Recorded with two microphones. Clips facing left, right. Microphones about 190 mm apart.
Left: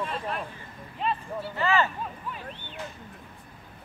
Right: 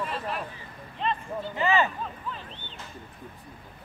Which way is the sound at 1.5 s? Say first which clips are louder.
Right 1 dB; 15° right (ahead or behind).